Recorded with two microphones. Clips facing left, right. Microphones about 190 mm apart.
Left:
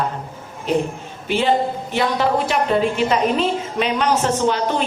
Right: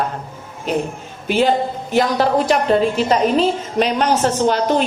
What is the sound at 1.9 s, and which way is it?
A woman's voice, 40° right (ahead or behind).